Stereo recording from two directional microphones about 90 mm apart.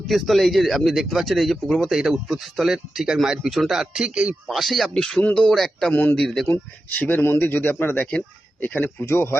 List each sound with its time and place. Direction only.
0.1 s speech: centre (ahead or behind)
5.9 s speech: 20° left (ahead or behind)
6.1 s speech: 5° left (ahead or behind)
6.5 s speech: 15° left (ahead or behind)